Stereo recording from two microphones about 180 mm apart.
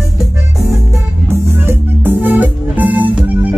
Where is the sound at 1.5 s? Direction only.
10° right (ahead or behind).